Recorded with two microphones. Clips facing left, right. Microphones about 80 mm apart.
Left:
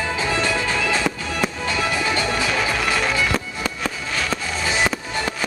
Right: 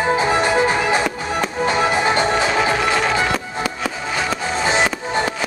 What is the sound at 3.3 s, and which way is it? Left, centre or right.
Music, centre.